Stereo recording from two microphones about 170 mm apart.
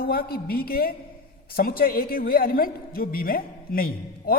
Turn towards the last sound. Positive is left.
turn(degrees=60)  # may be behind; listen again after turning